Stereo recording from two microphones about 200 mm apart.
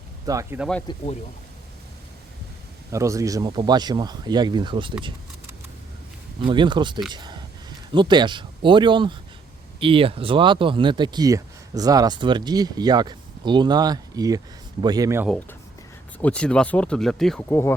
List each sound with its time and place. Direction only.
0.3 s speech: 15° right (ahead or behind)
0.6 s speech: 5° left (ahead or behind)
2.9 s speech: 15° right (ahead or behind)
6.4 s speech: 25° right (ahead or behind)
7.1 s a sound: 20° right (ahead or behind)
7.9 s speech: 20° right (ahead or behind)
15.3 s speech: 10° left (ahead or behind)
17.5 s speech: 10° left (ahead or behind)